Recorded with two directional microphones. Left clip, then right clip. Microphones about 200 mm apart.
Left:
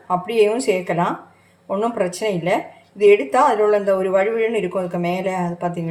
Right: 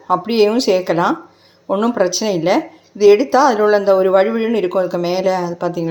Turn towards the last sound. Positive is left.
turn(degrees=-30)  # may be behind; listen again after turning